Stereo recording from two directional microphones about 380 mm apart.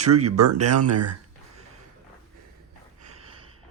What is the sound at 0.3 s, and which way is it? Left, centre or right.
Speech, right.